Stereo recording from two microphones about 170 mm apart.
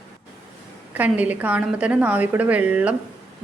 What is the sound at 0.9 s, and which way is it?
A woman's voice, 10° right (ahead or behind).